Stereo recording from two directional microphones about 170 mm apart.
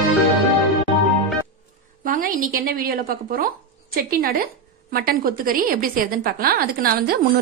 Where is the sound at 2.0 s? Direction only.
55° right (ahead or behind).